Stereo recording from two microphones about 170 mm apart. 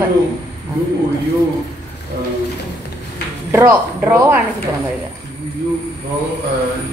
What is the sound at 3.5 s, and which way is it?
Speech, 10° right (ahead or behind).